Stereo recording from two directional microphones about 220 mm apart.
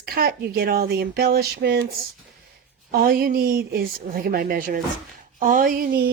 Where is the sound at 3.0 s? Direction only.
40° right (ahead or behind).